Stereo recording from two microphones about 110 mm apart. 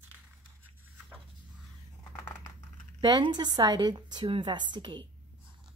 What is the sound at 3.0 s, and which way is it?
A woman's voice, 40° right (ahead or behind).